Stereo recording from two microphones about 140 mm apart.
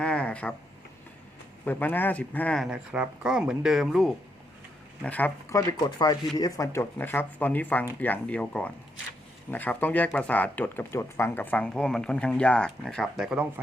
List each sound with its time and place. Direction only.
0.0 s a sound: 10° left (ahead or behind)
1.6 s speech: 15° left (ahead or behind)
2.6 s speech: 10° right (ahead or behind)
5.0 s speech: 10° left (ahead or behind)
5.5 s speech: 25° left (ahead or behind); by 13.5 s 5° right (ahead or behind)